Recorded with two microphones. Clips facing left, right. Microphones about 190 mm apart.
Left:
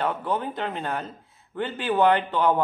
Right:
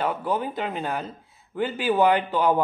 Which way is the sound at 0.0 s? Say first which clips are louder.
Right 1 dB; 5° right (ahead or behind).